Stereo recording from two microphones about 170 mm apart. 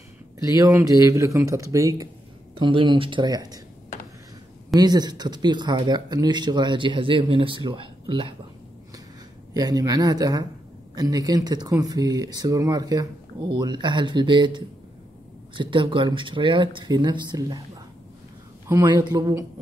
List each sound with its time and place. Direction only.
0.4 s speech: 20° right (ahead or behind)
4.7 s speech: 25° right (ahead or behind)
9.5 s speech: 20° right (ahead or behind)
18.7 s speech: 20° right (ahead or behind)